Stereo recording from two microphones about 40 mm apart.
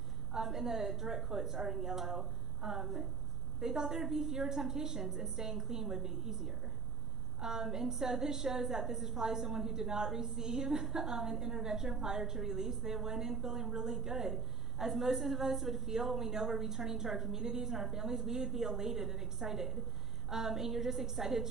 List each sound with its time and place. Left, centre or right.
0.3 s a woman's voice: centre